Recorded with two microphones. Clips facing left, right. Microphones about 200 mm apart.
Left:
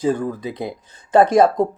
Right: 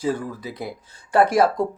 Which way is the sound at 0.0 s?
20° left (ahead or behind).